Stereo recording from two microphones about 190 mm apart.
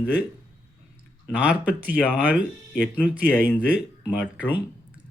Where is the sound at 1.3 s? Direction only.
5° right (ahead or behind).